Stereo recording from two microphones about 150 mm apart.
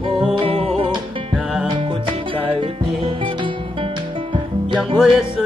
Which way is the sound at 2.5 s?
35° right (ahead or behind).